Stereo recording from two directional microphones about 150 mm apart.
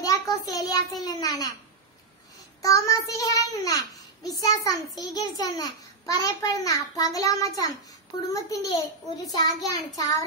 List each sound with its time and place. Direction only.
0.0 s a child's voice: 25° left (ahead or behind)
2.6 s a child's voice: 20° left (ahead or behind)